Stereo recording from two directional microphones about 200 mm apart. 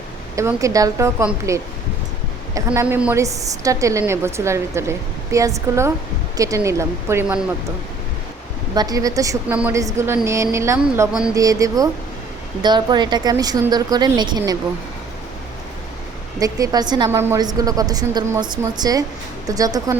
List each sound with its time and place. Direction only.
0.3 s a woman's voice: 15° right (ahead or behind)
8.7 s a woman's voice: 20° right (ahead or behind)
16.4 s a woman's voice: 20° right (ahead or behind)